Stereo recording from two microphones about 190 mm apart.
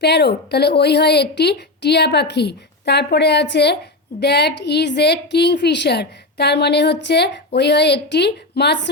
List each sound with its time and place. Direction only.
0.0 s a woman's voice: 60° left (ahead or behind)